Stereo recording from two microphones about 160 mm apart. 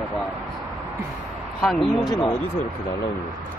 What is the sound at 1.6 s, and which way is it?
Speech, centre (ahead or behind).